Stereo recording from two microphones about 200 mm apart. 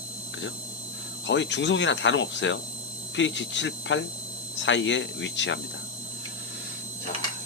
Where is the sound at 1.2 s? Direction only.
65° left (ahead or behind).